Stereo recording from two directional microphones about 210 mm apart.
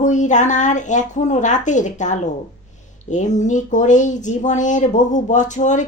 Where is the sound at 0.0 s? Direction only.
35° left (ahead or behind).